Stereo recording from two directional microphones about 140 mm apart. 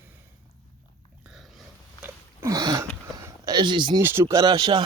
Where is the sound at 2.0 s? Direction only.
20° right (ahead or behind).